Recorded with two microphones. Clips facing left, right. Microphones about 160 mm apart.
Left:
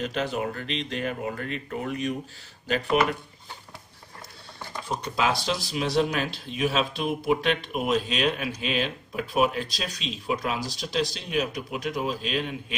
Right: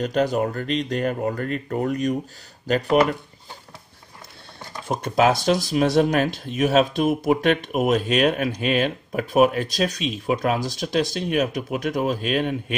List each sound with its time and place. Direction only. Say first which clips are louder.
0.0 s speech: right 7 dB; 40° right (ahead or behind)
4.8 s speech: right 7 dB; 50° right (ahead or behind)